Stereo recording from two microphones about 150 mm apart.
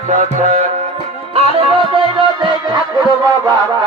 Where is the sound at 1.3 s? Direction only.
40° right (ahead or behind).